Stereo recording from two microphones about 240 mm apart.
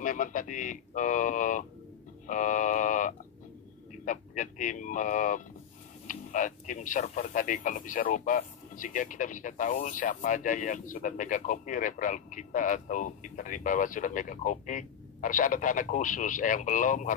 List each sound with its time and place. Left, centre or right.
0.0 s speech: left
2.2 s a sound: left
4.0 s speech: left